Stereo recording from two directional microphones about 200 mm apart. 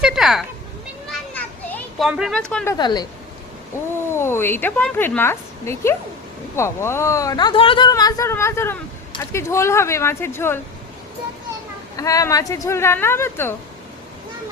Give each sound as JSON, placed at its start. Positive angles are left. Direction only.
{"t": 0.0, "sound": "cat", "side_deg": 0}
{"t": 1.1, "sound": "children playing", "side_deg": 10}
{"t": 2.0, "sound": "speech", "side_deg": 0}
{"t": 2.7, "sound": "speech", "side_deg": 20}
{"t": 4.1, "sound": "speech", "side_deg": 10}
{"t": 11.9, "sound": "speech", "side_deg": 15}